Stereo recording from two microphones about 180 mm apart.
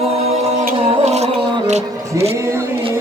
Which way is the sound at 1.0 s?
35° right (ahead or behind).